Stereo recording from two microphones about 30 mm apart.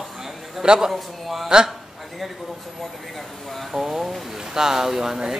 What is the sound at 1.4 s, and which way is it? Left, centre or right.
Speech, centre.